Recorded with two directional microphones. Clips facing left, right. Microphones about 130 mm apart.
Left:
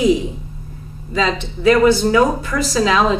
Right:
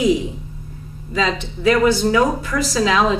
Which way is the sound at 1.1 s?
35° left (ahead or behind).